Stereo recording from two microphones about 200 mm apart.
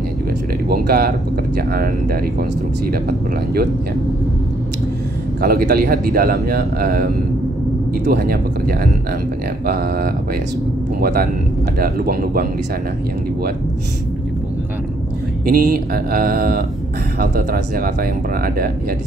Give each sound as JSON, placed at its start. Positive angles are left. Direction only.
{"t": 0.7, "sound": "a man's voice", "side_deg": -50}
{"t": 5.4, "sound": "a man's voice", "side_deg": -50}
{"t": 15.4, "sound": "a man's voice", "side_deg": -45}